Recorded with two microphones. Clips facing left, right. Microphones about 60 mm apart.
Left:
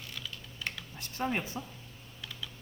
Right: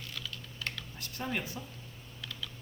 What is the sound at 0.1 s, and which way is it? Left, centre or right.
Typing, centre.